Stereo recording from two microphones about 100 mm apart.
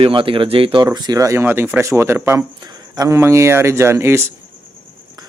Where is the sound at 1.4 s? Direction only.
20° right (ahead or behind).